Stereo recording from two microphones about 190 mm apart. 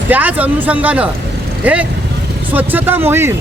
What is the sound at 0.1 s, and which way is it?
Speech, 10° right (ahead or behind).